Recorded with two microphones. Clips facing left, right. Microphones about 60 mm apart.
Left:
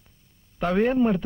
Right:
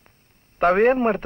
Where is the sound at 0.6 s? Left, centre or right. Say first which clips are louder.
Right 4 dB; right.